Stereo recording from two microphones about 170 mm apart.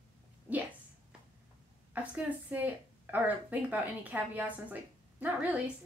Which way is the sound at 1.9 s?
10° right (ahead or behind).